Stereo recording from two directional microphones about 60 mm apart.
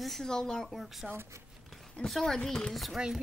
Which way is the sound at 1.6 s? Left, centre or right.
Centre.